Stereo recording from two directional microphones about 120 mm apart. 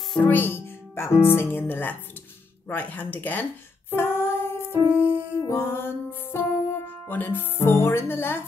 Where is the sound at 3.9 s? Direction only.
20° left (ahead or behind).